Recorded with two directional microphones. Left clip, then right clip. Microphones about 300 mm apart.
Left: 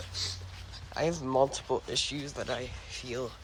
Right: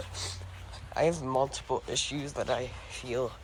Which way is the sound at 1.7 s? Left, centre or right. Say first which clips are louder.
Even; centre.